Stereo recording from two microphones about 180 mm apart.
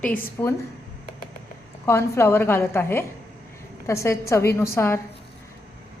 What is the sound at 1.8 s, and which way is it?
A woman's voice, 15° left (ahead or behind).